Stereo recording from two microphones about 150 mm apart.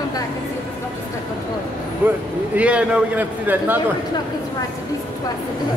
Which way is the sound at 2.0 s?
10° right (ahead or behind).